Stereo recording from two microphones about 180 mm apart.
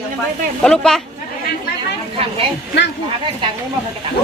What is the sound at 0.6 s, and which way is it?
Speech, 5° left (ahead or behind).